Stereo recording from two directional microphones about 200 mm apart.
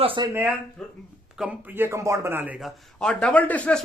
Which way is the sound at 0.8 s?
5° left (ahead or behind).